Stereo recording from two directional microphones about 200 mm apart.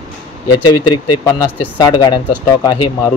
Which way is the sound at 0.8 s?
20° left (ahead or behind).